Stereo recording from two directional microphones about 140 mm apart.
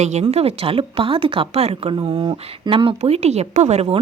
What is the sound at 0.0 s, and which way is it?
A woman's voice, 50° right (ahead or behind).